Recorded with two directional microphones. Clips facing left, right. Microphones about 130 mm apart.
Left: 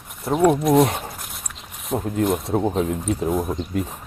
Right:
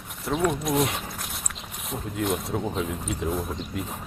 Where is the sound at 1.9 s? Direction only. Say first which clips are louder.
Left 10 dB; 90° left.